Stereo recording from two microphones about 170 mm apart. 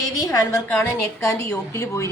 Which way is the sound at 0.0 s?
20° left (ahead or behind).